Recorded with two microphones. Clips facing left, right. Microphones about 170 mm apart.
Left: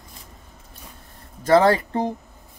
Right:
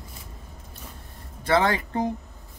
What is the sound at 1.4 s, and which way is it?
Speech, 40° left (ahead or behind).